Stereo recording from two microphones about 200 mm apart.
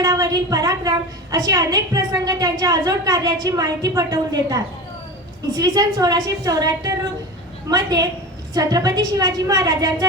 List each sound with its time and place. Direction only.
0.0 s a woman's voice: 15° right (ahead or behind)